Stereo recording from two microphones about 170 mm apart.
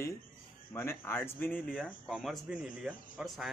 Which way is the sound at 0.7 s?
15° left (ahead or behind).